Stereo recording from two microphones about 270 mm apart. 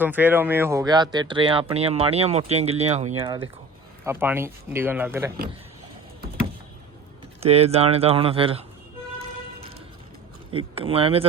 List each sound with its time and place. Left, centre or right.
0.0 s speech: centre
7.4 s speech: right
10.8 s speech: right